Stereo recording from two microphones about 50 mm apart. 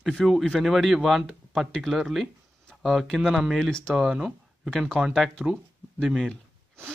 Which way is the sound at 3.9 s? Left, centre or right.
Centre.